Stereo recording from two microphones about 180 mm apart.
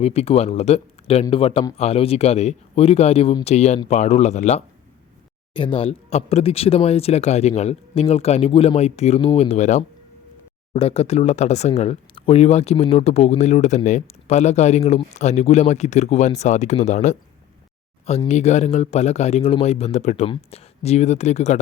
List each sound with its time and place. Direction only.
0.0 s speech: 35° left (ahead or behind)
18.3 s speech: 40° left (ahead or behind)